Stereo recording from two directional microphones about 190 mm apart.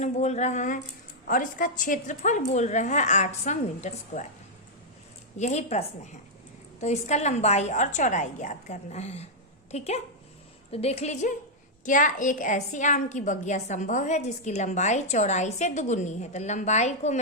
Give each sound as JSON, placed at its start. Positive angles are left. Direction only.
{"t": 0.0, "sound": "a woman's voice", "side_deg": 35}
{"t": 5.4, "sound": "a woman's voice", "side_deg": 35}